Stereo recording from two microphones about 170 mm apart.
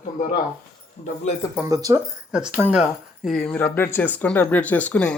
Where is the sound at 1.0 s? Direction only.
40° left (ahead or behind).